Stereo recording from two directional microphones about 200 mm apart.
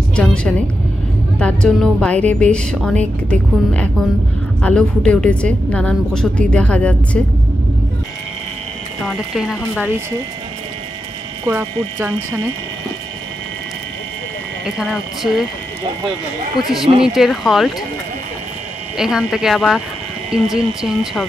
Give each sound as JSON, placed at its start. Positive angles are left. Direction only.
{"t": 0.1, "sound": "a woman's voice", "side_deg": 5}
{"t": 9.1, "sound": "a woman's voice", "side_deg": 0}
{"t": 11.4, "sound": "speech", "side_deg": -10}
{"t": 14.8, "sound": "a woman's voice", "side_deg": 0}
{"t": 16.5, "sound": "a woman's voice", "side_deg": 0}
{"t": 18.9, "sound": "a woman's voice", "side_deg": 0}